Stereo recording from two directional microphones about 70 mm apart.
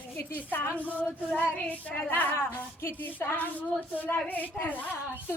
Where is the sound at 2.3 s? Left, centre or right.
Left.